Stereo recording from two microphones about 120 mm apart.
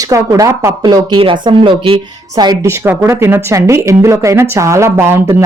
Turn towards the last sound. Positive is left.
turn(degrees=-20)  # may be behind; listen again after turning